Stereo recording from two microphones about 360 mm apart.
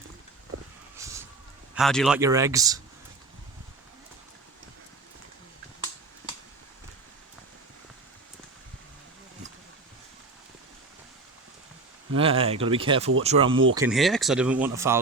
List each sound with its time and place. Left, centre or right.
0.9 s a sound: centre
1.7 s speech: centre
12.1 s speech: centre
13.7 s speech: centre